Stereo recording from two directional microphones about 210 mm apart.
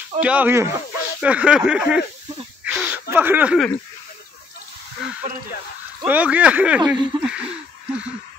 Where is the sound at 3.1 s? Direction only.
10° right (ahead or behind).